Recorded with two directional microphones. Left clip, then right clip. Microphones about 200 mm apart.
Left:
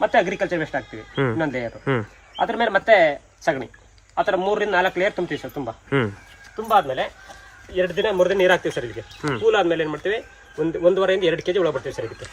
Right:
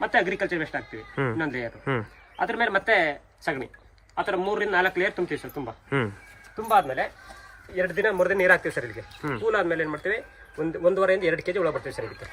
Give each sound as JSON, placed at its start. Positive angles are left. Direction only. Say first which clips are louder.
{"t": 0.0, "sound": "a man's voice", "louder": "left 5 dB", "side_deg": 20}
{"t": 1.1, "sound": "speech", "louder": "left 5 dB", "side_deg": 0}
{"t": 1.4, "sound": "speech", "louder": "left 5 dB", "side_deg": 20}
{"t": 1.8, "sound": "speech", "louder": "left 5 dB", "side_deg": 0}
{"t": 2.3, "sound": "a man's voice", "louder": "left 4 dB", "side_deg": 20}
{"t": 6.6, "sound": "speech", "louder": "left 3 dB", "side_deg": 5}